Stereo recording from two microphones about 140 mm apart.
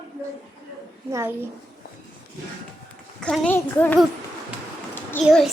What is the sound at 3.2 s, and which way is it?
Speech, 5° left (ahead or behind).